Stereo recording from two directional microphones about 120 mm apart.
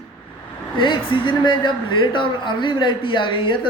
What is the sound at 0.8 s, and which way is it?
Speech, 45° left (ahead or behind).